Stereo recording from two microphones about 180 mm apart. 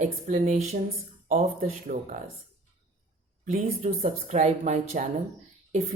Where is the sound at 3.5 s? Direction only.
40° right (ahead or behind).